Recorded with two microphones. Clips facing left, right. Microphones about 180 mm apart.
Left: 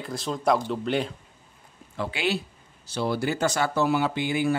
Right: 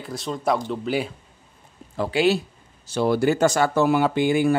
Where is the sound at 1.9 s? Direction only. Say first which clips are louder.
Right 7 dB; 40° right (ahead or behind).